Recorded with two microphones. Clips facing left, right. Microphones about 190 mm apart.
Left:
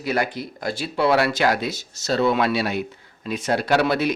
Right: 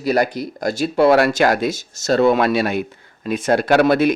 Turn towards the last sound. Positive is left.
turn(degrees=-50)  # may be behind; listen again after turning